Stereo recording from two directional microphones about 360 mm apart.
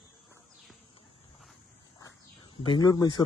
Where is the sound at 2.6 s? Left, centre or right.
Centre.